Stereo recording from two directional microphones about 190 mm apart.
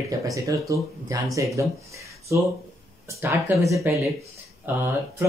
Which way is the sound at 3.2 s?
15° right (ahead or behind).